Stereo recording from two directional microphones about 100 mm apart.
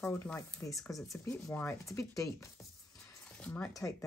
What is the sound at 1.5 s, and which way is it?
Speech, 20° left (ahead or behind).